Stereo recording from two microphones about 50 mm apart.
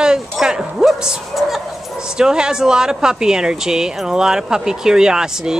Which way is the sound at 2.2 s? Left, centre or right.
Centre.